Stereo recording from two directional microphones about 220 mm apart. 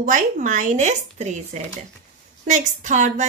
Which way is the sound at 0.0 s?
35° right (ahead or behind).